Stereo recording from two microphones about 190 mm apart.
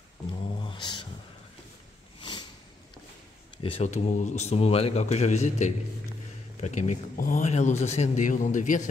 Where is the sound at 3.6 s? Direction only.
35° left (ahead or behind).